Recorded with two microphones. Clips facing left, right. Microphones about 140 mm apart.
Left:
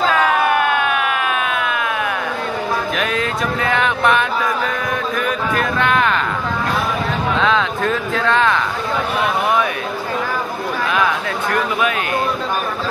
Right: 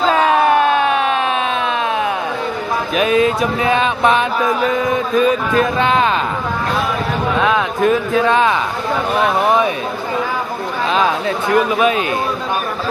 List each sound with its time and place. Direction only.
0.1 s a sound: 30° right (ahead or behind)
3.0 s mantra: 20° right (ahead or behind)
7.3 s speech: 10° right (ahead or behind)
10.9 s mantra: 25° right (ahead or behind)